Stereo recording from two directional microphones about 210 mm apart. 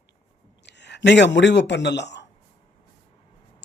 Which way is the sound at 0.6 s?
55° left (ahead or behind).